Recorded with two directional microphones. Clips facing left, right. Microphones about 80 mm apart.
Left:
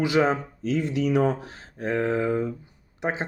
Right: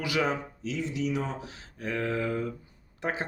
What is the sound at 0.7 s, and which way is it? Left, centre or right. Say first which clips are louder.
Speech: left 7 dB; left.